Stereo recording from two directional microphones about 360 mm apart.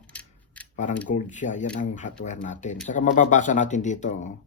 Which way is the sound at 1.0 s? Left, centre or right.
Left.